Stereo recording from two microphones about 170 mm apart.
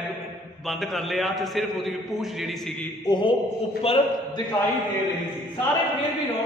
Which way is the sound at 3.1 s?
25° left (ahead or behind).